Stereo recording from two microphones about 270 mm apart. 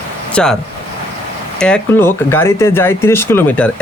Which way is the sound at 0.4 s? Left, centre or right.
Centre.